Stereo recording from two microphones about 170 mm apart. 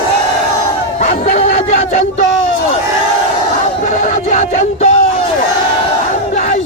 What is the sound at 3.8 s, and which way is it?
Music, 50° left (ahead or behind).